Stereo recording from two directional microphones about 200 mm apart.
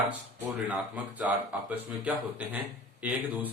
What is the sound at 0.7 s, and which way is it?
Speech, 5° right (ahead or behind).